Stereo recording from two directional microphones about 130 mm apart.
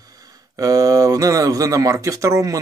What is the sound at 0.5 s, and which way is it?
Speech, 25° right (ahead or behind).